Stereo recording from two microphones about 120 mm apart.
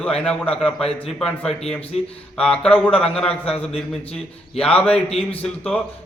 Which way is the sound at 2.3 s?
10° left (ahead or behind).